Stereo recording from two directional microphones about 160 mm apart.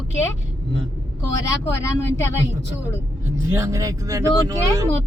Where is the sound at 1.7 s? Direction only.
15° left (ahead or behind).